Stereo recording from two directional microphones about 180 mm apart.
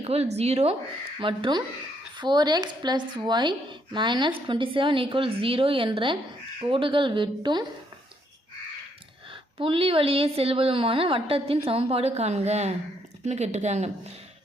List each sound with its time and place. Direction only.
0.0 s a woman's voice: 35° right (ahead or behind)
9.3 s a woman's voice: 30° right (ahead or behind)